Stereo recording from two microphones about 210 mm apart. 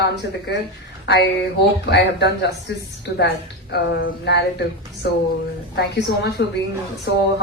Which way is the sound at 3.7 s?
55° left (ahead or behind).